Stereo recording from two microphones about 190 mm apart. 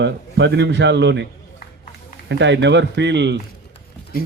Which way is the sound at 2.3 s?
70° right (ahead or behind).